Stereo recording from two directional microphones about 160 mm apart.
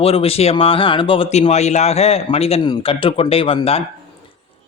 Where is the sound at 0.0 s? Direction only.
35° left (ahead or behind).